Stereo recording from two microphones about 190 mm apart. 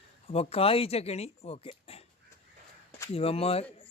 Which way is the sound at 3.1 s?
30° left (ahead or behind).